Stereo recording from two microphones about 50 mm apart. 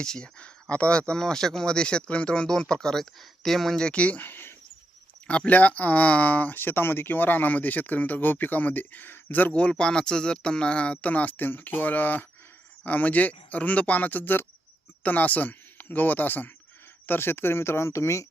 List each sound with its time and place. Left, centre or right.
0.0 s speech: centre
3.8 s speech: centre; by 4.5 s left
5.3 s speech: left
9.6 s speech: centre; by 16.5 s left
17.1 s speech: left